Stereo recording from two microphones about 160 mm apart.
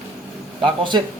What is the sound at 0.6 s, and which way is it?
Speech, 30° right (ahead or behind).